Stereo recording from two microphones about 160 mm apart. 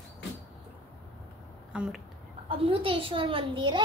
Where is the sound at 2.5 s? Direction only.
35° right (ahead or behind).